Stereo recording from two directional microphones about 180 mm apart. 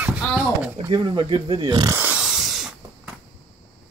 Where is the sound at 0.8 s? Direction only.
25° right (ahead or behind).